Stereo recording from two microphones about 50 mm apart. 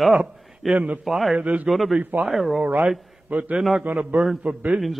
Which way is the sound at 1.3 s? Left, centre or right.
Right.